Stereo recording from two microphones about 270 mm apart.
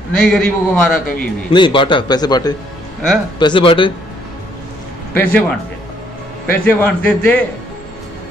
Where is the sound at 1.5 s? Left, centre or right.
Centre.